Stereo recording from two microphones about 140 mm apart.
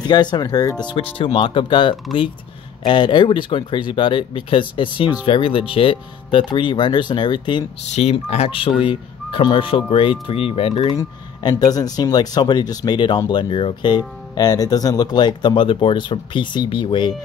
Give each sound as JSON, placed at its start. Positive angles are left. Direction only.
{"t": 0.0, "sound": "speech", "side_deg": 30}
{"t": 7.8, "sound": "speech", "side_deg": 50}
{"t": 10.7, "sound": "speech", "side_deg": 30}